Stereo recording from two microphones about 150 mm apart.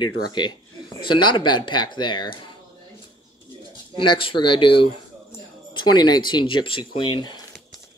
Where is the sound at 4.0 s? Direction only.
35° left (ahead or behind).